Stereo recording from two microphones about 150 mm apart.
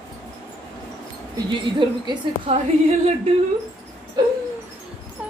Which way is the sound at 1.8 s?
35° right (ahead or behind).